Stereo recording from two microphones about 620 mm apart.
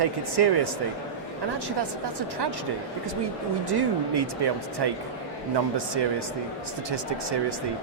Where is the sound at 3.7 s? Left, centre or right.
Right.